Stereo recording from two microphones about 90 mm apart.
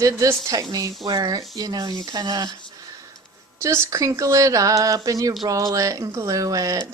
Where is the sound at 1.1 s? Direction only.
55° right (ahead or behind).